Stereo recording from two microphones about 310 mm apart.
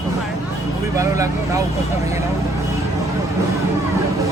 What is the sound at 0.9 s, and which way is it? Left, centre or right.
Speech, centre.